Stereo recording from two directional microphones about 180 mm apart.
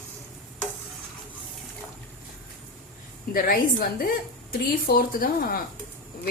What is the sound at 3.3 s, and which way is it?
A woman's voice, 55° left (ahead or behind).